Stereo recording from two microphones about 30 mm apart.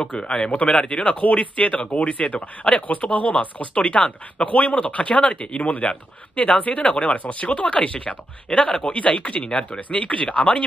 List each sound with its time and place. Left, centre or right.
0.1 s a man's voice: left
0.5 s speech: left
0.7 s a man's voice: left
1.2 s speech: left
2.9 s speech: left
3.5 s speech: left
4.5 s speech: left
4.7 s speech: left
9.4 s speech: left
9.8 s speech: left